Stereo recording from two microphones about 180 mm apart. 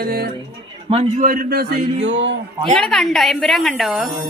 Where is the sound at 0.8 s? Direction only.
35° right (ahead or behind).